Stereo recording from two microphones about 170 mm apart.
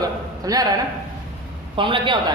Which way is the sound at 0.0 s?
20° right (ahead or behind).